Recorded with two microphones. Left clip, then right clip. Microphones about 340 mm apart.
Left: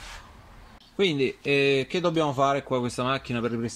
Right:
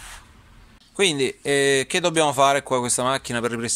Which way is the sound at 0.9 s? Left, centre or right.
Right.